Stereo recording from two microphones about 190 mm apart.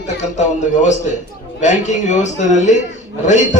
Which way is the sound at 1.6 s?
40° left (ahead or behind).